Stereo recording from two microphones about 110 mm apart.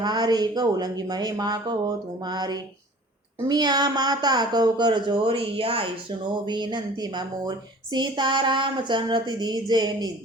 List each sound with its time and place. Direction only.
0.0 s speech: 40° right (ahead or behind); by 5.9 s 55° right (ahead or behind)
6.4 s speech: 45° right (ahead or behind)